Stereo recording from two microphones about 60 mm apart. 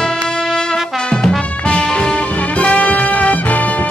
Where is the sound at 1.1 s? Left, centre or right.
Centre.